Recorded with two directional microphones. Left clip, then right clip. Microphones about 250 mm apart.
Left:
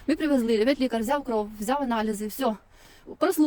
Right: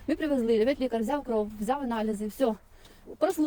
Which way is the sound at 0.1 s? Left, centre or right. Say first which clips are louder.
Left 2 dB; left.